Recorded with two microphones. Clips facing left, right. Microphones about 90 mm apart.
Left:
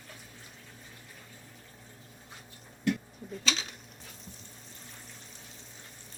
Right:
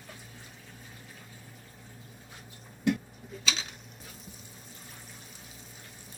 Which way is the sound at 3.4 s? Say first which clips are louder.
Left 1 dB; centre (ahead or behind).